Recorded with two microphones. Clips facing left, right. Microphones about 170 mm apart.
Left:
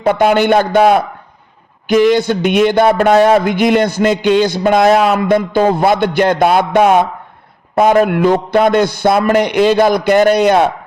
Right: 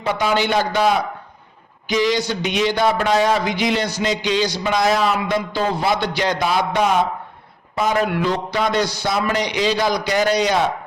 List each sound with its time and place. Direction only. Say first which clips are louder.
0.0 s a man's voice: left 8 dB; 55° left (ahead or behind)